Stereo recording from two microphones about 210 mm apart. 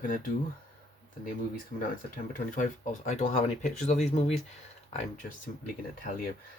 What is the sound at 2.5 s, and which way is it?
Speech, 35° left (ahead or behind).